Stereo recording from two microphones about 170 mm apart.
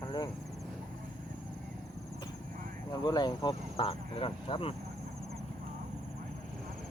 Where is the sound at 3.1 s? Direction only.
25° left (ahead or behind).